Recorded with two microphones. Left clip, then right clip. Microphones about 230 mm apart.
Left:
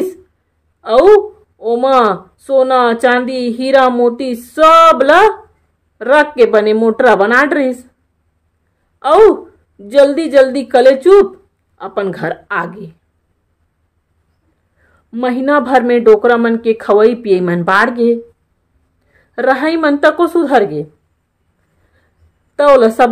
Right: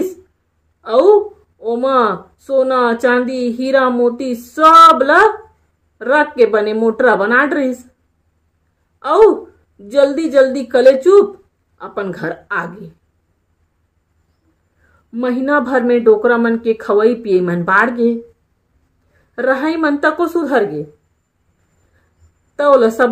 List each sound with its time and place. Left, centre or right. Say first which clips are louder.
0.7 s a sound: left 3 dB; left
1.6 s a woman's voice: left 4 dB; left
9.8 s a woman's voice: left 4 dB; left
15.0 s a woman's voice: left 3 dB; left
19.3 s a woman's voice: left 3 dB; left
22.6 s a woman's voice: left 3 dB; left